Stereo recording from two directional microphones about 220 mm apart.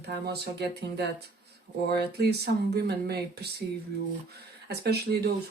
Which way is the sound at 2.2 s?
45° right (ahead or behind).